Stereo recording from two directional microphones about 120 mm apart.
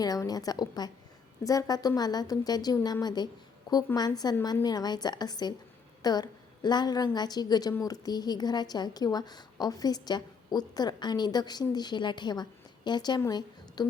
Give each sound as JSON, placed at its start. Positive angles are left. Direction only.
{"t": 0.0, "sound": "a woman's voice", "side_deg": 30}